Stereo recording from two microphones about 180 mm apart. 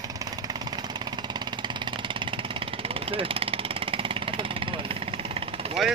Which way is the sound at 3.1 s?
30° right (ahead or behind).